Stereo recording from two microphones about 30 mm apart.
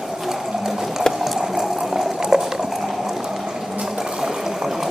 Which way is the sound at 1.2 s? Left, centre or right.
Centre.